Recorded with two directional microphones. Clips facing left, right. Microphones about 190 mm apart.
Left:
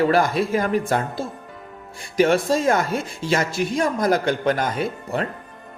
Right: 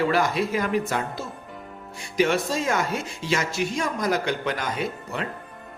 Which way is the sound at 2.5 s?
50° left (ahead or behind).